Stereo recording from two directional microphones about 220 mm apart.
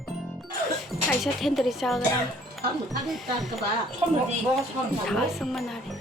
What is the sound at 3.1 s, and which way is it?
Speech, centre (ahead or behind).